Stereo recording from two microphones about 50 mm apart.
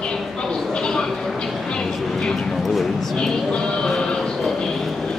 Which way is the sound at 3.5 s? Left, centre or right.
Centre.